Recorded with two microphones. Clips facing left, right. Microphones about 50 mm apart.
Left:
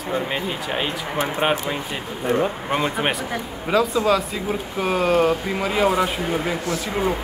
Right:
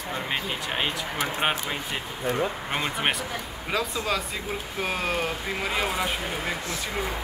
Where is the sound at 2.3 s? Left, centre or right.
Left.